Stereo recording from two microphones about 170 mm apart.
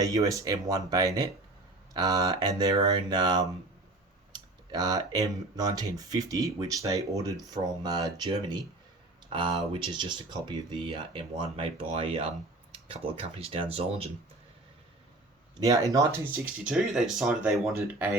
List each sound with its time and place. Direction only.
0.0 s speech: 20° right (ahead or behind); by 14.1 s 35° right (ahead or behind)
15.5 s speech: 20° right (ahead or behind)